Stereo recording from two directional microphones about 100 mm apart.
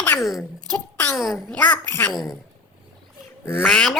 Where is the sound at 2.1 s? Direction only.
Centre (ahead or behind).